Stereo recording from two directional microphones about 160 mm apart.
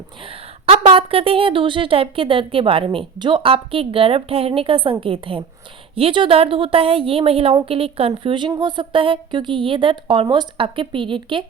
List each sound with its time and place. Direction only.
0.3 s a woman's voice: 35° right (ahead or behind)